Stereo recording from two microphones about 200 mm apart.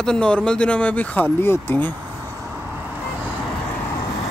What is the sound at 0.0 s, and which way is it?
Speech, 5° left (ahead or behind).